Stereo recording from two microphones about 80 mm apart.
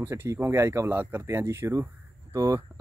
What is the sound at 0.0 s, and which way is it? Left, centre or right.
Speech, right.